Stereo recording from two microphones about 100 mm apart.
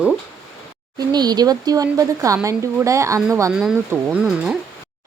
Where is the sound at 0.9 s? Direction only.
40° right (ahead or behind).